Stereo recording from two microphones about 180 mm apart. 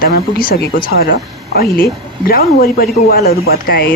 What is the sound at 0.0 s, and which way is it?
Speech, 55° left (ahead or behind).